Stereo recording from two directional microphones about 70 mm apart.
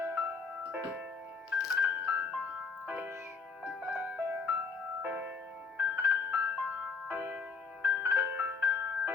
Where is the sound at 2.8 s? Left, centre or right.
Centre.